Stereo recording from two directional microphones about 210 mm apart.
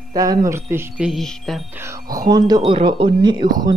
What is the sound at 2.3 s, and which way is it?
Speech, 20° right (ahead or behind).